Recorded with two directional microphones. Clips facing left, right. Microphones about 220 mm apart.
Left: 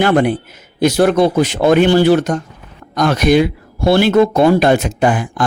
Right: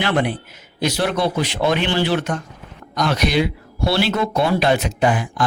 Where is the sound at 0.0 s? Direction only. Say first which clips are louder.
Left 7 dB; 45° left (ahead or behind).